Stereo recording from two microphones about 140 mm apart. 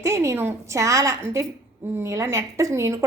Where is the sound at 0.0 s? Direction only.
20° right (ahead or behind).